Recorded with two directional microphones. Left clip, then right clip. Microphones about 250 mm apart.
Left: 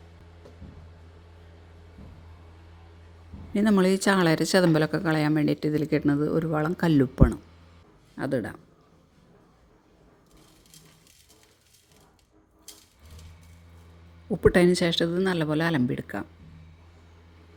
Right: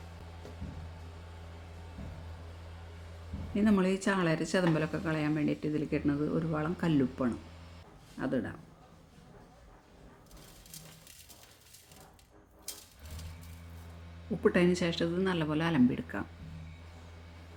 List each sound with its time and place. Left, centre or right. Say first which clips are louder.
3.5 s speech: left 7 dB; left
14.4 s speech: left 8 dB; left